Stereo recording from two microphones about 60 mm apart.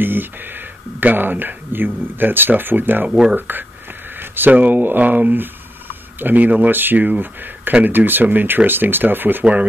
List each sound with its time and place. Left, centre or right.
0.0 s speech: right
3.1 s speech: centre
3.3 s speech: right